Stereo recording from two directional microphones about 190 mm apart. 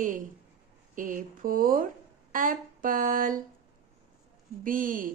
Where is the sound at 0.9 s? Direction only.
45° right (ahead or behind).